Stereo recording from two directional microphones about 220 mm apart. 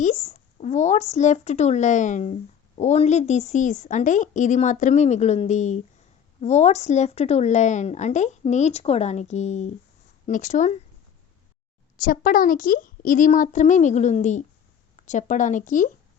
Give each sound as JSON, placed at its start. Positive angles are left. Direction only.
{"t": 0.0, "sound": "speech", "side_deg": 35}
{"t": 11.9, "sound": "speech", "side_deg": 40}